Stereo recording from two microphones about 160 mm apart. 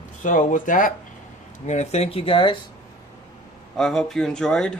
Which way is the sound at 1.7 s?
40° left (ahead or behind).